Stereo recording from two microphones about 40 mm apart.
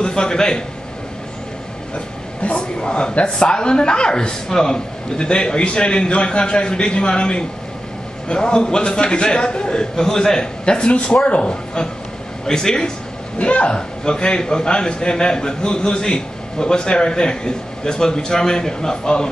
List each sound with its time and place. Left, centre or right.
0.0 s a man's voice: centre
2.4 s a man's voice: left
13.4 s speech: left
13.7 s a man's voice: centre